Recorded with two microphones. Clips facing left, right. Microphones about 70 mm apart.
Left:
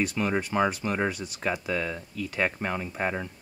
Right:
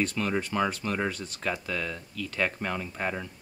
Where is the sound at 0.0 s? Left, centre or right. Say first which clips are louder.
Left 1 dB; centre.